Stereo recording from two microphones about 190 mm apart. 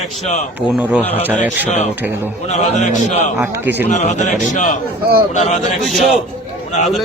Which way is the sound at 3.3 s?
10° right (ahead or behind).